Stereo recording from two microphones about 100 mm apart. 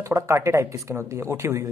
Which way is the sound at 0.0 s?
30° right (ahead or behind).